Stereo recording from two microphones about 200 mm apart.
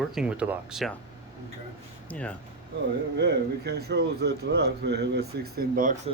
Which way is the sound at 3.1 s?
55° right (ahead or behind).